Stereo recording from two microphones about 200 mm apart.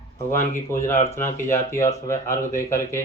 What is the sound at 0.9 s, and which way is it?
Speech, 35° left (ahead or behind).